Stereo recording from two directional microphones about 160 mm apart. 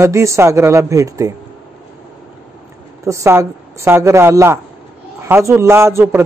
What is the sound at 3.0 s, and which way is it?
A man's voice, 20° right (ahead or behind).